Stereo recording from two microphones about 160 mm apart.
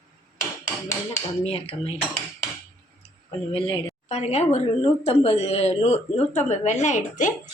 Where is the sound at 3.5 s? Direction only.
30° left (ahead or behind).